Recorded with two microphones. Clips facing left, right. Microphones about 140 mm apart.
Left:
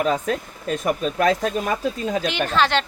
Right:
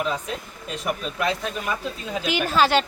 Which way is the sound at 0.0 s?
45° left (ahead or behind).